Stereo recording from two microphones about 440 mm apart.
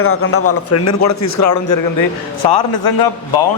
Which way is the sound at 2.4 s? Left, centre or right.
Left.